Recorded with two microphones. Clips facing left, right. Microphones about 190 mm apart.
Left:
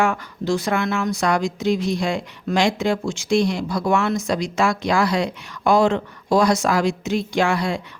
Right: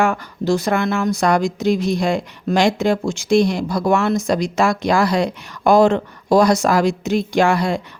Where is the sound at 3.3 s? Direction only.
55° right (ahead or behind).